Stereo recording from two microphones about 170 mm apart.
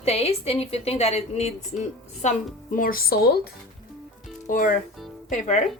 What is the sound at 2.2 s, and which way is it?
Speech, 50° left (ahead or behind).